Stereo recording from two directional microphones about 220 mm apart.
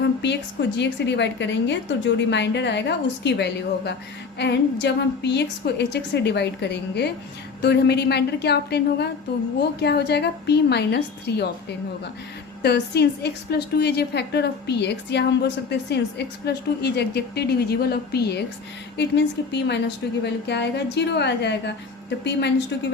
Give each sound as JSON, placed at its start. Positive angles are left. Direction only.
{"t": 0.0, "sound": "a sound", "side_deg": 50}
{"t": 0.8, "sound": "a woman's voice", "side_deg": 50}
{"t": 12.6, "sound": "a woman's voice", "side_deg": 50}